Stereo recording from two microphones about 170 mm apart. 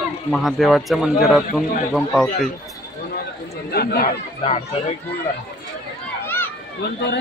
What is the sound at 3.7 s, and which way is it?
Speech, 65° left (ahead or behind).